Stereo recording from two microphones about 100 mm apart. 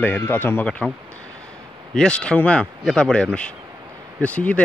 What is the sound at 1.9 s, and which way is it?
Speech, 10° left (ahead or behind).